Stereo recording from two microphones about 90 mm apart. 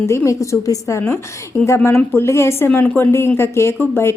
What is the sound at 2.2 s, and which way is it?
A woman's voice, 30° left (ahead or behind).